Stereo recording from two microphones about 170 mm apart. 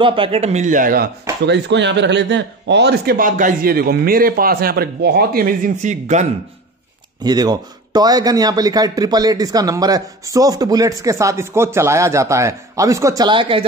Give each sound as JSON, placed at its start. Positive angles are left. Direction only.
{"t": 0.0, "sound": "speech", "side_deg": -30}
{"t": 1.4, "sound": "speech", "side_deg": -90}
{"t": 7.2, "sound": "speech", "side_deg": -25}